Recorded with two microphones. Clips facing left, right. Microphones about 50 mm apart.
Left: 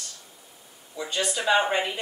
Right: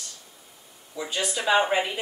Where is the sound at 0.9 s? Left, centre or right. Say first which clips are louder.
Left 1 dB; centre.